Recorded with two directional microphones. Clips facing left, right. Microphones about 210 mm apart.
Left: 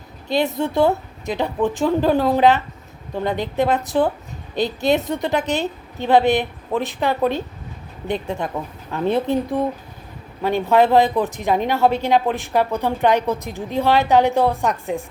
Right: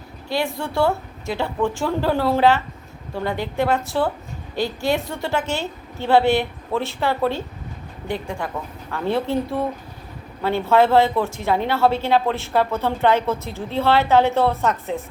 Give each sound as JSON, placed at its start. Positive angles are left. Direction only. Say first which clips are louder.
{"t": 0.3, "sound": "a woman's voice", "louder": "left 4 dB", "side_deg": 20}